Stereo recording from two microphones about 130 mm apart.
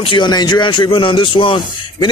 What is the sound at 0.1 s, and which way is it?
A man's voice, 35° left (ahead or behind).